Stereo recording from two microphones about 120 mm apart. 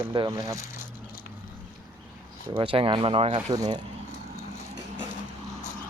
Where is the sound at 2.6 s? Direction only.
50° right (ahead or behind).